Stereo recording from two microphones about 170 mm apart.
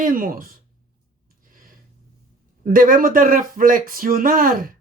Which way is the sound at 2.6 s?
55° right (ahead or behind).